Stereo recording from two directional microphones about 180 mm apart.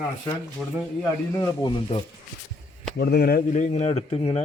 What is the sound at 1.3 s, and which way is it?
Speech, 20° left (ahead or behind).